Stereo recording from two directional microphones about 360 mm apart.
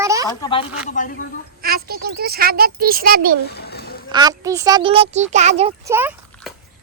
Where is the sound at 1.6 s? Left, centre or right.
Right.